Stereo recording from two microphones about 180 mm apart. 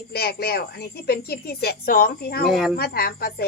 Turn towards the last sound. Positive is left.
turn(degrees=60)  # may be behind; listen again after turning